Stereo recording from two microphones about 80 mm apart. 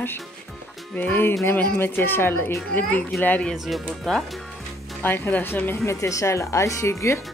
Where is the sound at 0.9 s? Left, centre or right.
Left.